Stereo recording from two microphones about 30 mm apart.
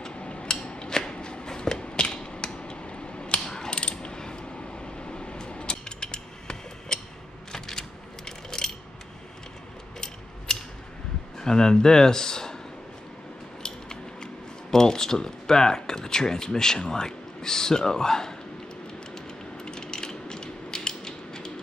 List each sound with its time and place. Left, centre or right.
0.1 s a sound: left
0.8 s shuffling cards: left
1.1 s a sound: left
3.4 s ratchet: left
4.0 s a sound: left
9.9 s mechanisms: centre
11.3 s speech: left
13.6 s speech: left
19.1 s mechanisms: left